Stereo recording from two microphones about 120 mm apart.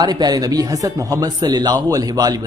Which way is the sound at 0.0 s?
35° right (ahead or behind).